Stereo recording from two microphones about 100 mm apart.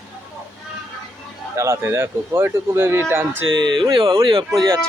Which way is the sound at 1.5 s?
30° right (ahead or behind).